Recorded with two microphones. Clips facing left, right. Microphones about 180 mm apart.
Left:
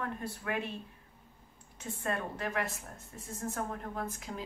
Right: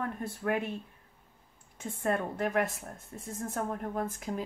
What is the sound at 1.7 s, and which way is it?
Speech, 50° right (ahead or behind).